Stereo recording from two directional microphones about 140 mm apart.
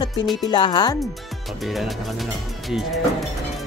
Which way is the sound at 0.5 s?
30° left (ahead or behind).